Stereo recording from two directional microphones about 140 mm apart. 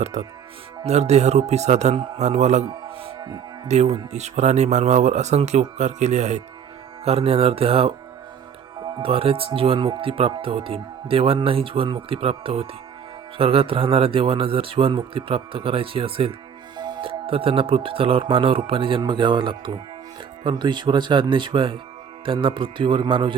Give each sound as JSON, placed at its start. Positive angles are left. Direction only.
{"t": 0.0, "sound": "speech", "side_deg": -50}
{"t": 2.6, "sound": "music", "side_deg": -35}
{"t": 3.9, "sound": "speech", "side_deg": -55}